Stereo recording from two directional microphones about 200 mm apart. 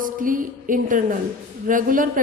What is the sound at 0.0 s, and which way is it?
A woman's voice, 40° right (ahead or behind).